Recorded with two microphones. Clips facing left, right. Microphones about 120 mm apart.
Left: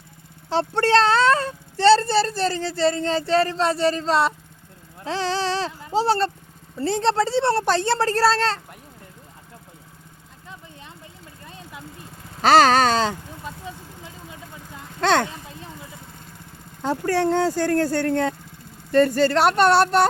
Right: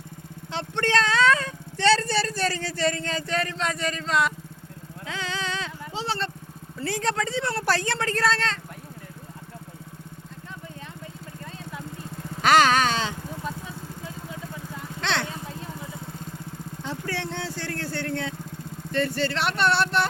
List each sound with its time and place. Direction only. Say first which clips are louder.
0.5 s speech: left 6 dB; 35° left (ahead or behind)
6.8 s speech: left 6 dB; 30° left (ahead or behind)
12.4 s speech: left 4 dB; 35° left (ahead or behind)
15.0 s speech: left 9 dB; 45° left (ahead or behind)
16.8 s speech: left 11 dB; 45° left (ahead or behind)